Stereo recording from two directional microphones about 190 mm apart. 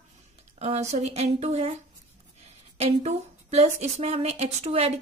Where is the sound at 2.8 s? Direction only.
35° right (ahead or behind).